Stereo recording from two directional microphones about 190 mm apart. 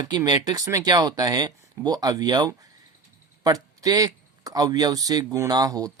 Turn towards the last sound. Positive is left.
turn(degrees=-20)  # may be behind; listen again after turning